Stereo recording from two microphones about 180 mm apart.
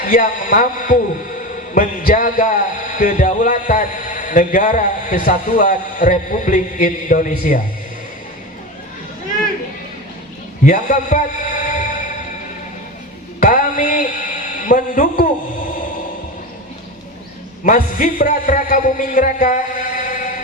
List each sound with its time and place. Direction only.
0.0 s a man's voice: 50° left (ahead or behind)
10.7 s music: 50° left (ahead or behind)
13.4 s a man's voice: 50° left (ahead or behind)
17.6 s a man's voice: 50° left (ahead or behind)